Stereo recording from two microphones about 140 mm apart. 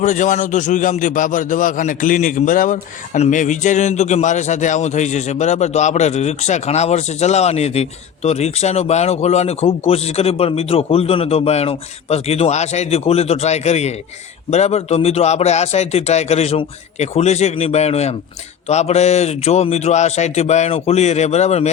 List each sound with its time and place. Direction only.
0.0 s a man's voice: 60° left (ahead or behind)